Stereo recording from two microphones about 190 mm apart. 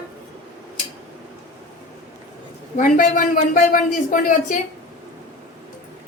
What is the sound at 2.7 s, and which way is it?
A man's voice, 45° left (ahead or behind).